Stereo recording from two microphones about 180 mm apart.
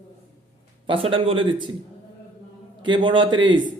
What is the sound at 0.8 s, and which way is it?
Speech, 30° right (ahead or behind).